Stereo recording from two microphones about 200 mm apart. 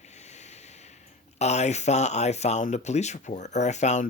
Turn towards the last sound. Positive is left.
turn(degrees=35)  # may be behind; listen again after turning